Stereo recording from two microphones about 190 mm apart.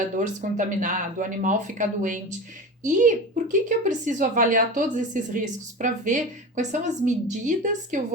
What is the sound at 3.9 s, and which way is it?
Speech, 45° right (ahead or behind).